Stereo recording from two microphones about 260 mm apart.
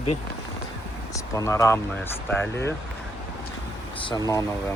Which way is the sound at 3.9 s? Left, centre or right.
Centre.